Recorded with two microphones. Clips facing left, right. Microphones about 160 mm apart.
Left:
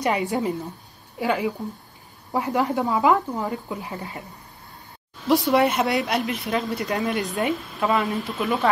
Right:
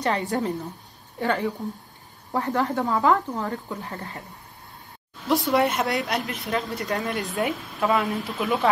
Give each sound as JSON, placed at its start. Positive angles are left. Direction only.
{"t": 0.0, "sound": "speech", "side_deg": 15}
{"t": 2.3, "sound": "speech", "side_deg": 20}
{"t": 5.3, "sound": "speech", "side_deg": 0}